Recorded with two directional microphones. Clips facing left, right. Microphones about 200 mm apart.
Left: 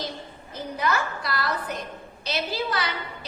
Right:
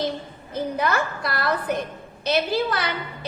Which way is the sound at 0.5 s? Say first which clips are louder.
Right 4 dB; 55° right (ahead or behind).